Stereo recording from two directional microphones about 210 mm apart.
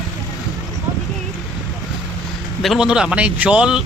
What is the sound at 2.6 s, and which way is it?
A man's voice, centre (ahead or behind).